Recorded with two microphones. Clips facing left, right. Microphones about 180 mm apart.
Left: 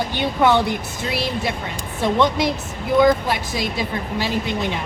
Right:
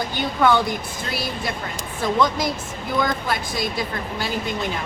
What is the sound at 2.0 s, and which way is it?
Speech, 25° left (ahead or behind).